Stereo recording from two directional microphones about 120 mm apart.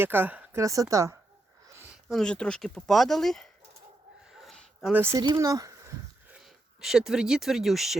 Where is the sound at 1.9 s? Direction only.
Centre (ahead or behind).